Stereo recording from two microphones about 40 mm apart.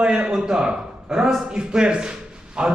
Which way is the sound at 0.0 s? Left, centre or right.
Centre.